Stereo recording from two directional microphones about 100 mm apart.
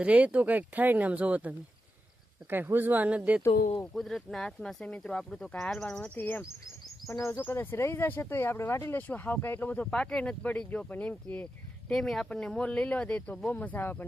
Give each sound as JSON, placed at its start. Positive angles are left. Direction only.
{"t": 0.0, "sound": "speech", "side_deg": -15}
{"t": 3.9, "sound": "speech", "side_deg": 5}
{"t": 6.1, "sound": "speech", "side_deg": 20}
{"t": 9.8, "sound": "speech", "side_deg": 5}
{"t": 11.9, "sound": "speech", "side_deg": 0}